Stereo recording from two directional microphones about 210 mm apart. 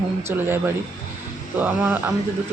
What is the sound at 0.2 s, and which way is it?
A man's voice, 10° right (ahead or behind).